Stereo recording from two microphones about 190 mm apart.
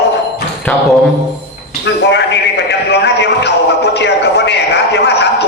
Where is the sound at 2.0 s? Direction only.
65° left (ahead or behind).